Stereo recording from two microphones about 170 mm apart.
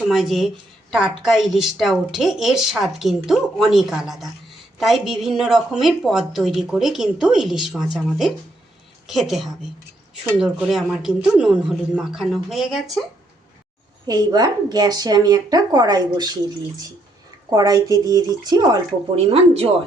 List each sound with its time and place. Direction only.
0.0 s a woman's voice: centre (ahead or behind)
14.1 s speech: 25° right (ahead or behind)